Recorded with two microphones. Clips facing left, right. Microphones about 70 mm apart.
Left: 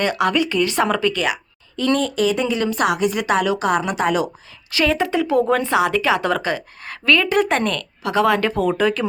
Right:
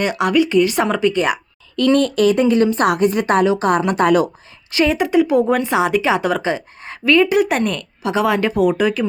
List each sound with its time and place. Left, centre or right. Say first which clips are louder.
0.0 s speech: right 3 dB; centre
1.1 s a woman's voice: right 4 dB; right
1.7 s a woman's voice: right 5 dB; right
4.7 s speech: right 3 dB; centre